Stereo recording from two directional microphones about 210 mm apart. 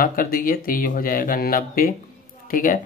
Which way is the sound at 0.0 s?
40° left (ahead or behind).